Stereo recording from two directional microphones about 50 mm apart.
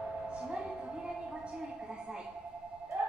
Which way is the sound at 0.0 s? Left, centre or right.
Centre.